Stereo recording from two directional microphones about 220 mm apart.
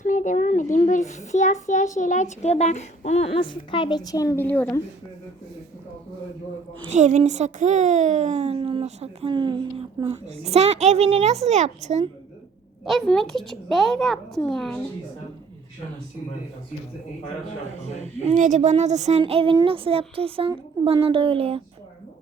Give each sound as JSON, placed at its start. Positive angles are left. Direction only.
{"t": 0.0, "sound": "a child's voice", "side_deg": 35}
{"t": 6.9, "sound": "a child's voice", "side_deg": -35}
{"t": 12.8, "sound": "a child's voice", "side_deg": 0}
{"t": 18.2, "sound": "a child's voice", "side_deg": -30}